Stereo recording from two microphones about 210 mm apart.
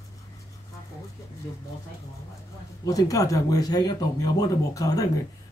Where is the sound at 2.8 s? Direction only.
15° left (ahead or behind).